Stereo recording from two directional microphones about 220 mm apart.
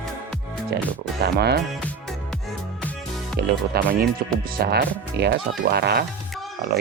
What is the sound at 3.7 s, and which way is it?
Speech, 45° right (ahead or behind).